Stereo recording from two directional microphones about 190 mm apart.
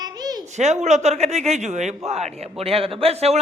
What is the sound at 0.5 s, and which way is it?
A man's voice, 35° right (ahead or behind).